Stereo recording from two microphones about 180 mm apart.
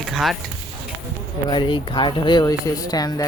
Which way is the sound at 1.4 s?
25° left (ahead or behind).